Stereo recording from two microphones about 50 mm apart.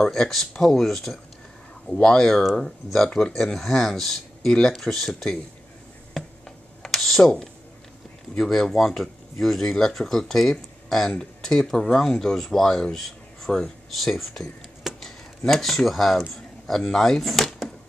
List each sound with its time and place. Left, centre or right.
0.0 s speech: centre
3.5 s speech: centre
6.8 s computer keyboard: centre
8.4 s speech: centre
11.6 s speech: centre